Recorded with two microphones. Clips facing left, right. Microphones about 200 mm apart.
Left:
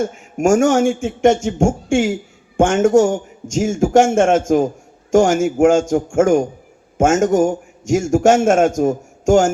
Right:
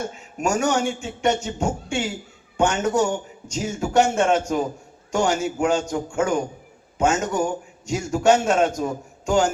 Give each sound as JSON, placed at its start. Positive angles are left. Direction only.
{"t": 0.0, "sound": "a man's voice", "side_deg": 50}